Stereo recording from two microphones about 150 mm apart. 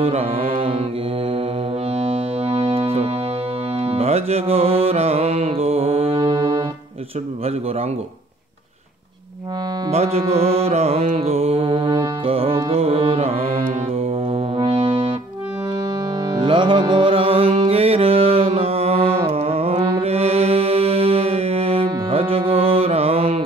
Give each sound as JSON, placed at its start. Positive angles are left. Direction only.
{"t": 0.0, "sound": "music", "side_deg": -40}
{"t": 2.0, "sound": "music", "side_deg": -40}
{"t": 6.1, "sound": "brass instrument", "side_deg": -25}
{"t": 9.8, "sound": "music", "side_deg": -45}
{"t": 16.3, "sound": "music", "side_deg": -30}